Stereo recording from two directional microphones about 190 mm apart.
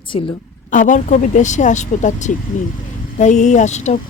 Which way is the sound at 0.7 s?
40° left (ahead or behind).